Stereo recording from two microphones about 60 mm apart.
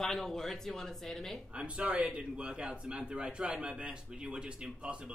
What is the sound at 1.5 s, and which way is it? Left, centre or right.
A man's voice, centre.